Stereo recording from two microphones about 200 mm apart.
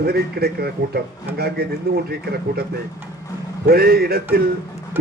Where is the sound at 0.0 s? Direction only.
50° right (ahead or behind).